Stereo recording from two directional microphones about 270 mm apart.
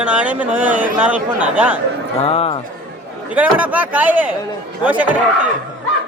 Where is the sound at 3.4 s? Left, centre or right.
Centre.